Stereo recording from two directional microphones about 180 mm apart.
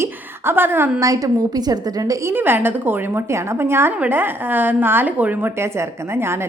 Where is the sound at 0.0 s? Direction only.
10° right (ahead or behind).